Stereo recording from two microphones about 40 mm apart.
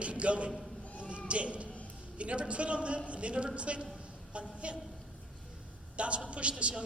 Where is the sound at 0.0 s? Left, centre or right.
Right.